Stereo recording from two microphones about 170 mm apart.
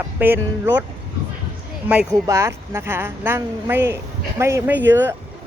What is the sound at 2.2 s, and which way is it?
Speech, 15° right (ahead or behind).